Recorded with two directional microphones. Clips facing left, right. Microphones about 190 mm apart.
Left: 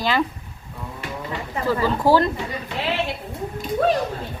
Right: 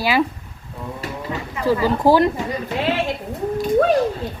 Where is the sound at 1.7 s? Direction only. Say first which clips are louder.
Right 3 dB; 15° right (ahead or behind).